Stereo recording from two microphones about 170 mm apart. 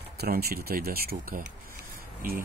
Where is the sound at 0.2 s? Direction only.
65° right (ahead or behind).